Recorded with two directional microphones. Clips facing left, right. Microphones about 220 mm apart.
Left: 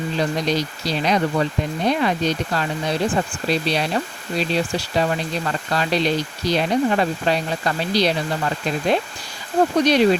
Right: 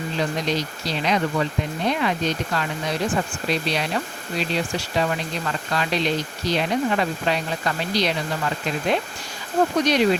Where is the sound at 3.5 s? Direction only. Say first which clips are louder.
Left 3 dB; 35° left (ahead or behind).